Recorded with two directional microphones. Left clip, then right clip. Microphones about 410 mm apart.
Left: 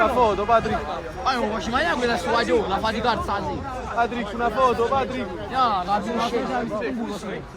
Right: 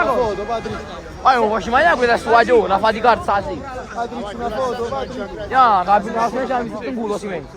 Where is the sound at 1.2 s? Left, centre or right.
Centre.